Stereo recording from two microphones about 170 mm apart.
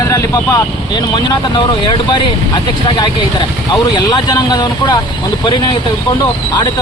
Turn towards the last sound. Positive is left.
turn(degrees=25)  # may be behind; listen again after turning